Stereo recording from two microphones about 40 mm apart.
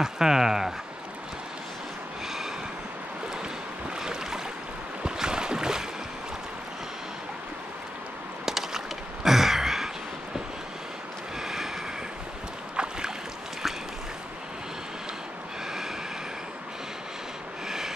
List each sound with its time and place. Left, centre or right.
0.0 s speech: centre
4.0 s boat: centre
8.5 s a sound: centre
11.4 s vehicle: centre
12.7 s boat: right
17.6 s train: centre